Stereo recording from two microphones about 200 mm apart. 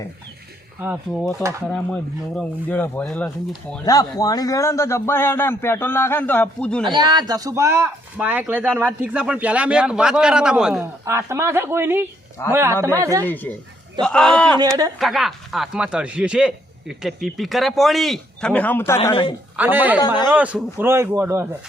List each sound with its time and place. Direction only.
0.8 s a man's voice: 5° right (ahead or behind)
3.8 s a man's voice: 20° left (ahead or behind)
6.8 s a man's voice: 20° right (ahead or behind); by 10.8 s 5° right (ahead or behind)
11.0 s speech: 15° right (ahead or behind)
13.2 s a man's voice: 10° left (ahead or behind)
14.6 s speech: 20° right (ahead or behind)
14.9 s a man's voice: centre (ahead or behind)
19.0 s speech: 25° left (ahead or behind)
19.5 s speech: 10° right (ahead or behind)